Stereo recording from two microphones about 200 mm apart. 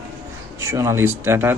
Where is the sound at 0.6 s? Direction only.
15° right (ahead or behind).